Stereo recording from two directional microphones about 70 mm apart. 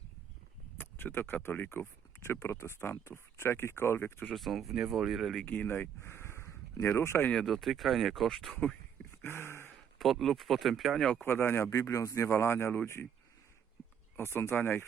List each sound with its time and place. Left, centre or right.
0.8 s speech: left
4.3 s speech: centre
5.5 s speech: left
7.3 s speech: centre
9.2 s a sound: left
10.0 s speech: centre
11.2 s speech: left
14.2 s speech: left